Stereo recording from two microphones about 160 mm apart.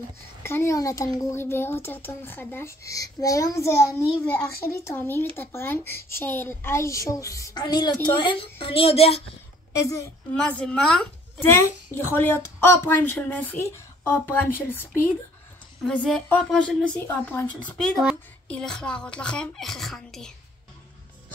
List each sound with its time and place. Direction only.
0.4 s a woman's voice: 15° left (ahead or behind); by 9.2 s 40° left (ahead or behind)
9.8 s a woman's voice: 20° left (ahead or behind)
10.3 s a woman's voice: 5° left (ahead or behind)